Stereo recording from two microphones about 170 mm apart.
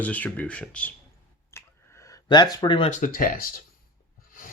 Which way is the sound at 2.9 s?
55° left (ahead or behind).